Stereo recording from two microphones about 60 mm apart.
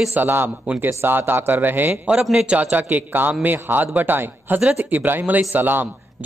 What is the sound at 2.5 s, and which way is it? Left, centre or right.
A man's voice, right.